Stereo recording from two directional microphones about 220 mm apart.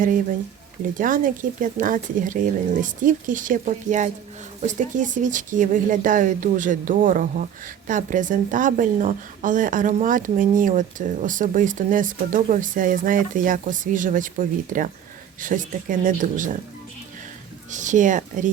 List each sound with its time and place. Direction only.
0.9 s a woman's voice: 40° right (ahead or behind)
17.7 s speech: 35° right (ahead or behind)